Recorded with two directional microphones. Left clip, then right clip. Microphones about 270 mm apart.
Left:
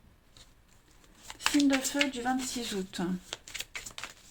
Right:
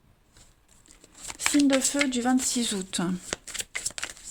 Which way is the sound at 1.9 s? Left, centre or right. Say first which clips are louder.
Right 4 dB; right.